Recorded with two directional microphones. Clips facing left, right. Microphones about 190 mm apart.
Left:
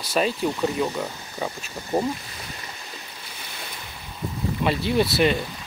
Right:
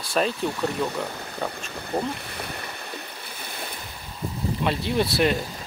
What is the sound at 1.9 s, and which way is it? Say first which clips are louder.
Speech: left 3 dB; 20° left (ahead or behind).